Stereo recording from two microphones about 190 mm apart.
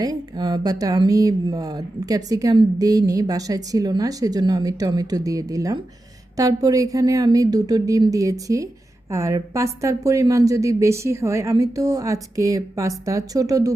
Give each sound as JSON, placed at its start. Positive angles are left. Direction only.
{"t": 0.0, "sound": "speech", "side_deg": -20}